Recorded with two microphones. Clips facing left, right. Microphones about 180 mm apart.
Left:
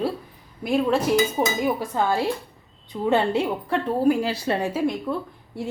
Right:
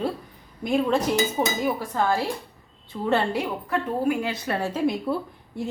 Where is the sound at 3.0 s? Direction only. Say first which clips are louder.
Left 3 dB; 15° left (ahead or behind).